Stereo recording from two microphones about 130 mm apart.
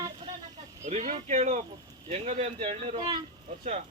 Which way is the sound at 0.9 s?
60° right (ahead or behind).